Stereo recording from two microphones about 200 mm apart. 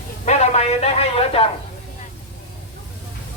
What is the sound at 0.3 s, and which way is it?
A man's voice, 35° left (ahead or behind).